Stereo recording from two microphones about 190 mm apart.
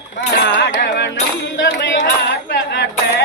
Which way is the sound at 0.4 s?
65° left (ahead or behind).